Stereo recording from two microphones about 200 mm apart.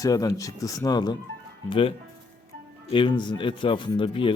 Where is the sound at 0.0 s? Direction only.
20° left (ahead or behind).